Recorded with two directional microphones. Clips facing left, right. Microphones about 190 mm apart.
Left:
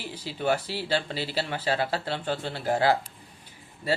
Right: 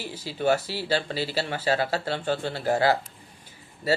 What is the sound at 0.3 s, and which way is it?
Speech, 45° right (ahead or behind).